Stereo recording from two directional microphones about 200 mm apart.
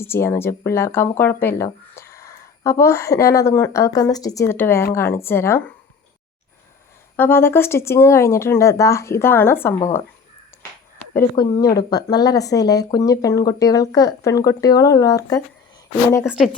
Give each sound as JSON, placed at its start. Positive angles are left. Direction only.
{"t": 0.0, "sound": "speech", "side_deg": 10}
{"t": 7.2, "sound": "speech", "side_deg": 10}
{"t": 10.5, "sound": "a sound", "side_deg": 10}
{"t": 11.6, "sound": "speech", "side_deg": 55}
{"t": 11.9, "sound": "speech", "side_deg": 20}
{"t": 16.2, "sound": "speech", "side_deg": -5}